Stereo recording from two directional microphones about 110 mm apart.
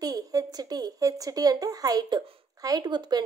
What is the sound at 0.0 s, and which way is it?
Speech, 35° right (ahead or behind).